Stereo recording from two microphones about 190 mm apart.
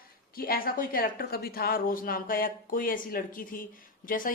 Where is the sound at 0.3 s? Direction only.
50° left (ahead or behind).